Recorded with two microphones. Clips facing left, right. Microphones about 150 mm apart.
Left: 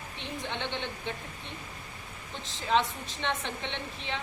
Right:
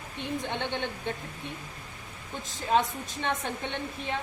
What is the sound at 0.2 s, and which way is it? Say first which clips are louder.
Speech: right 4 dB; 50° right (ahead or behind).